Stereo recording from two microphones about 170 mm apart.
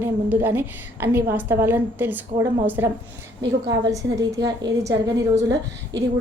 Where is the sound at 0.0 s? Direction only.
15° right (ahead or behind).